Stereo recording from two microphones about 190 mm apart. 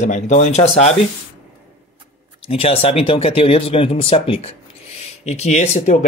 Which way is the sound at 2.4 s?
30° left (ahead or behind).